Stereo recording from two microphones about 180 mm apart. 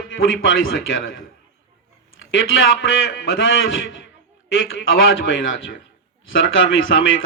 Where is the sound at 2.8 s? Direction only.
90° left.